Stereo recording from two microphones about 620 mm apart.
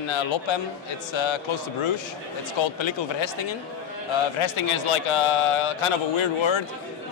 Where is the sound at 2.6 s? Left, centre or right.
Left.